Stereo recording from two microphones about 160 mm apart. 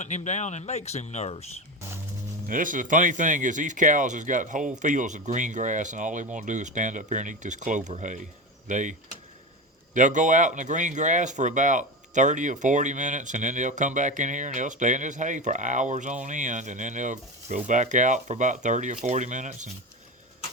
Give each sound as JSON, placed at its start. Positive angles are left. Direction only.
{"t": 0.0, "sound": "speech", "side_deg": 45}
{"t": 2.5, "sound": "speech", "side_deg": -55}